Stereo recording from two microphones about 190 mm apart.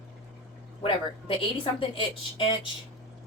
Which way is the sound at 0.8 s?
30° left (ahead or behind).